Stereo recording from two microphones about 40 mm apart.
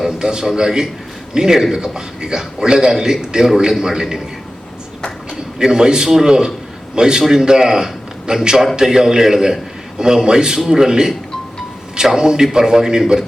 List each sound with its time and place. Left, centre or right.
0.0 s a man's voice: centre
5.5 s a man's voice: centre